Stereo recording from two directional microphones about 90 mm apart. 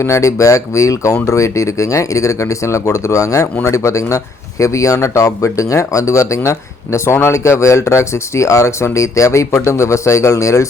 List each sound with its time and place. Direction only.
0.0 s speech: 35° left (ahead or behind)